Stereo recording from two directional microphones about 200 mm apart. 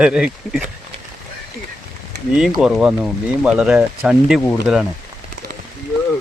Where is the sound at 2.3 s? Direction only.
5° right (ahead or behind).